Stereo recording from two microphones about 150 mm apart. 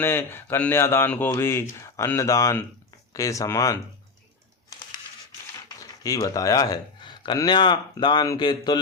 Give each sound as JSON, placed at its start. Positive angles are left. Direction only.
{"t": 0.0, "sound": "speech", "side_deg": 15}
{"t": 5.6, "sound": "speech", "side_deg": 25}